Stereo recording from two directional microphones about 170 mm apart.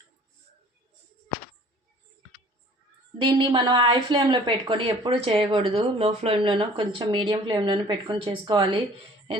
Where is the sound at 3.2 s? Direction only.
30° right (ahead or behind).